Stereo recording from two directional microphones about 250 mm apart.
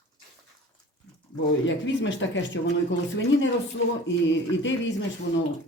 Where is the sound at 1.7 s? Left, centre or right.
Left.